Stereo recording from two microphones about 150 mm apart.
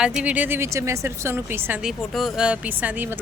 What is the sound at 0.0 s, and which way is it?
Speech, 10° right (ahead or behind).